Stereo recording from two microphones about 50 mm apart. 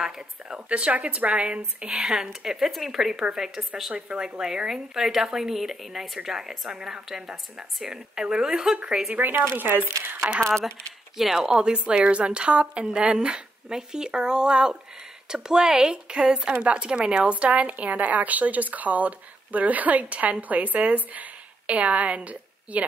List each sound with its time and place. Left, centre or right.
0.0 s a woman's voice: centre
0.7 s a woman's voice: right
9.3 s speech: right
9.6 s speech: right
11.1 s a woman's voice: centre; by 22.8 s right